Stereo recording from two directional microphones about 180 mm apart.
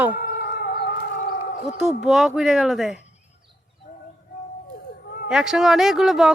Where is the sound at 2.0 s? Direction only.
Centre (ahead or behind).